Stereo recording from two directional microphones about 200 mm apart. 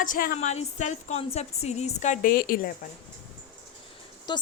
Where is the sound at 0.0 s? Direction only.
45° left (ahead or behind).